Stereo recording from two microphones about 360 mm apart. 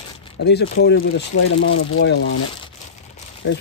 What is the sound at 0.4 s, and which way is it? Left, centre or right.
Speech, left.